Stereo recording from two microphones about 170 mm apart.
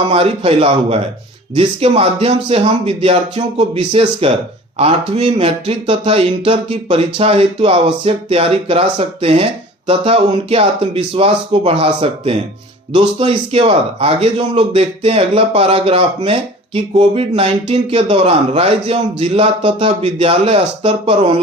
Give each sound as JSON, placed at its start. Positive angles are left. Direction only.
{"t": 0.1, "sound": "speech", "side_deg": -35}